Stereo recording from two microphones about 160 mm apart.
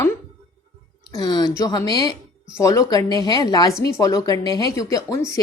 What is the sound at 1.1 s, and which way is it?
A woman's voice, 25° left (ahead or behind).